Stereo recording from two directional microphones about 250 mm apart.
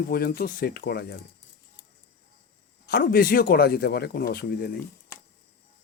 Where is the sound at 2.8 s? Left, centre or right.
Left.